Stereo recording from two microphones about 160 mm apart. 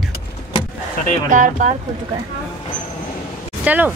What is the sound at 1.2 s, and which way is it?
Speech, 55° right (ahead or behind).